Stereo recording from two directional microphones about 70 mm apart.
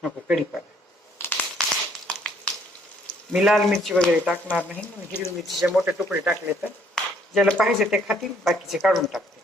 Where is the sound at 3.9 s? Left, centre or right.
Centre.